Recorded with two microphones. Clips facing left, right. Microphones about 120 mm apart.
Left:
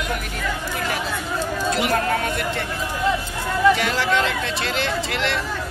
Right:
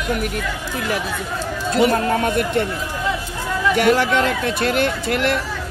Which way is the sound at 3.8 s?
55° right (ahead or behind).